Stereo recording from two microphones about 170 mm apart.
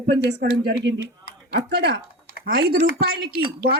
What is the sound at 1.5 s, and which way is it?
Speech, 80° right.